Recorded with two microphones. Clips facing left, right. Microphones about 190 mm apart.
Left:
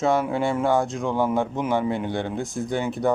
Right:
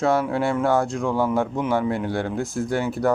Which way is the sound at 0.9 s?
Centre (ahead or behind).